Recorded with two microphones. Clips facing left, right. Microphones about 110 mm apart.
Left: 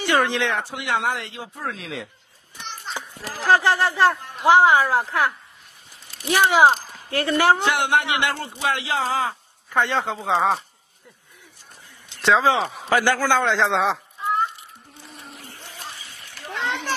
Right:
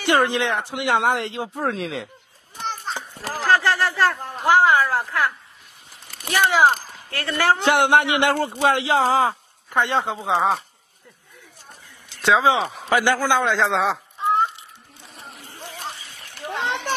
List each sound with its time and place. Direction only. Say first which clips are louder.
0.1 s a man's voice: right 2 dB; 15° right (ahead or behind)
0.7 s a man's voice: right 4 dB; 25° right (ahead or behind)
2.6 s a sound: right 4 dB; 40° right (ahead or behind)
3.4 s speech: left 1 dB; 15° left (ahead or behind)
4.2 s speech: right 3 dB; 40° right (ahead or behind)
4.5 s speech: left 1 dB; 15° left (ahead or behind)
6.3 s speech: left 1 dB; 15° left (ahead or behind)
7.6 s a man's voice: right 4 dB; 30° right (ahead or behind)
9.7 s a man's voice: right 1 dB; 15° right (ahead or behind)
12.2 s a man's voice: right 1 dB; 10° right (ahead or behind)
14.2 s fowl: right 3 dB; 25° right (ahead or behind)
15.0 s a sound: even; centre (ahead or behind)
15.4 s a sound: right 7 dB; 20° right (ahead or behind)